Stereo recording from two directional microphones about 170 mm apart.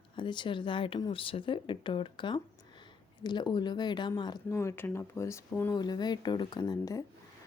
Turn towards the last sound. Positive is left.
turn(degrees=20)  # may be behind; listen again after turning